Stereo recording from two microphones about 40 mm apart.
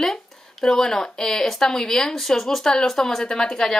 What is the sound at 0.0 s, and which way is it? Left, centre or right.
Speech, centre.